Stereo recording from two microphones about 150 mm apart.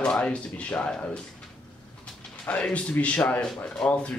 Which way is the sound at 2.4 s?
10° left (ahead or behind).